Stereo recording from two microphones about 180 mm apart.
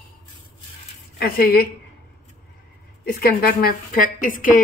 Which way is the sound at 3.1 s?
55° left (ahead or behind).